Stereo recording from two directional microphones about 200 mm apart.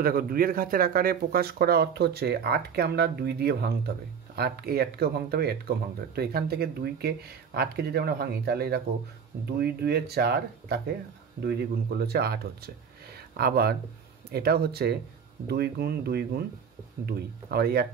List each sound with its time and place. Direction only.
0.0 s speech: 45° right (ahead or behind)
12.0 s speech: 50° right (ahead or behind)